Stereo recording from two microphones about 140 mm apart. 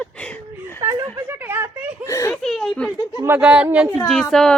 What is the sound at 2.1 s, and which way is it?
Speech, 20° left (ahead or behind).